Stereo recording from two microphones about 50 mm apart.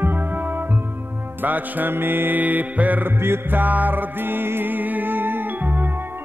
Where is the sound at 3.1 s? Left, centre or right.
Right.